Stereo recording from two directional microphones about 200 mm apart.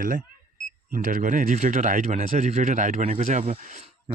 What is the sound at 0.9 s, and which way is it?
Speech, 40° right (ahead or behind).